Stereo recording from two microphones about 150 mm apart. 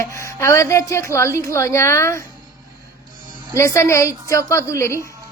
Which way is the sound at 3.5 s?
20° left (ahead or behind).